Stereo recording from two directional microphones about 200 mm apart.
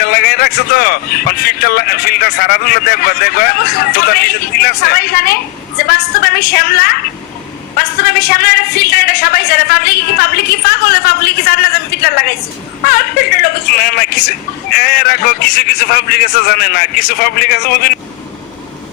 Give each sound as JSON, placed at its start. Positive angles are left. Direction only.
{"t": 0.0, "sound": "a man's voice", "side_deg": 50}